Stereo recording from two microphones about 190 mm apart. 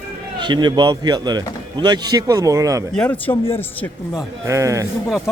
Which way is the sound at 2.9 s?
5° left (ahead or behind).